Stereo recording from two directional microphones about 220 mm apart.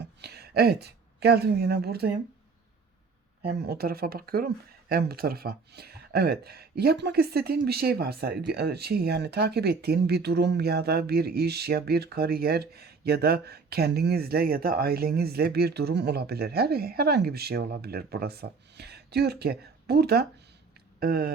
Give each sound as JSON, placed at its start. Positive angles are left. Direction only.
{"t": 0.0, "sound": "speech", "side_deg": -50}
{"t": 3.5, "sound": "speech", "side_deg": -50}